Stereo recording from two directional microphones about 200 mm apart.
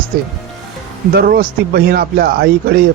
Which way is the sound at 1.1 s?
50° right (ahead or behind).